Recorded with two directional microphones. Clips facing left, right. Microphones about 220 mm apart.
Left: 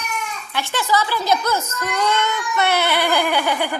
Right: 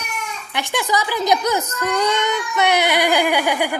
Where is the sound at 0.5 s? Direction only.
15° right (ahead or behind).